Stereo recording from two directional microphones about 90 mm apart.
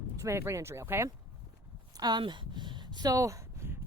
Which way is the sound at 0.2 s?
30° right (ahead or behind).